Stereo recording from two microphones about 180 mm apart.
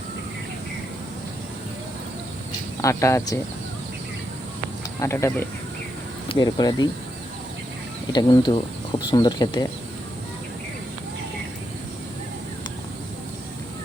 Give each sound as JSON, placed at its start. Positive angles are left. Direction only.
{"t": 2.8, "sound": "speech", "side_deg": 15}
{"t": 4.9, "sound": "speech", "side_deg": 15}
{"t": 8.1, "sound": "speech", "side_deg": 25}